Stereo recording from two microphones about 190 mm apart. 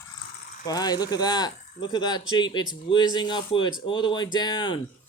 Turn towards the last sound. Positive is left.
turn(degrees=20)  # may be behind; listen again after turning